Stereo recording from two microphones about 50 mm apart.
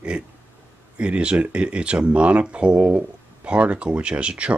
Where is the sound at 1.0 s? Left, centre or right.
Right.